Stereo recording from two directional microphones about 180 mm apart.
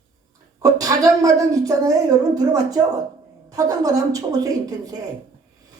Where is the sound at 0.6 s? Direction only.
20° right (ahead or behind).